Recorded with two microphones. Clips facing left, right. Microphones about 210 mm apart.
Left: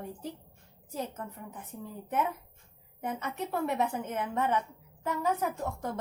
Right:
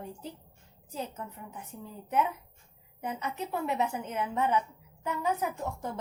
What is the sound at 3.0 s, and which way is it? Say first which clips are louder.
A woman's voice: even; 50° left (ahead or behind).